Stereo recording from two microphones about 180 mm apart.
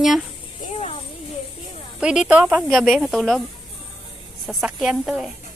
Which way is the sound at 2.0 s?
5° right (ahead or behind).